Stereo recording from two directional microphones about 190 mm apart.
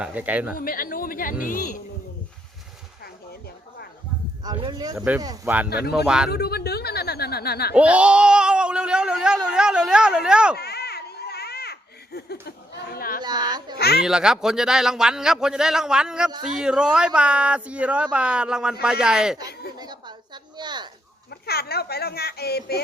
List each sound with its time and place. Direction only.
0.0 s speech: 10° right (ahead or behind)
0.5 s speech: 50° left (ahead or behind)
4.4 s speech: 20° right (ahead or behind)
4.9 s speech: 5° right (ahead or behind)
6.3 s speech: 55° left (ahead or behind)
7.7 s speech: 5° right (ahead or behind)
10.6 s a sound: 55° left (ahead or behind)
13.2 s speech: 20° right (ahead or behind)
13.7 s speech: 55° left (ahead or behind)
14.0 s speech: 5° right (ahead or behind)
19.8 s a sound: 25° right (ahead or behind)
21.2 s speech: 55° left (ahead or behind)